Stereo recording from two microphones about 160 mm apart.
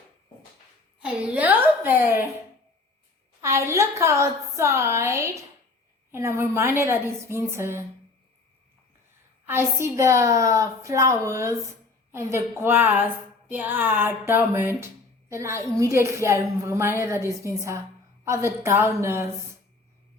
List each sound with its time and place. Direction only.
0.9 s a woman's voice: 5° right (ahead or behind)
3.4 s a woman's voice: 20° right (ahead or behind)
9.5 s a woman's voice: 15° right (ahead or behind)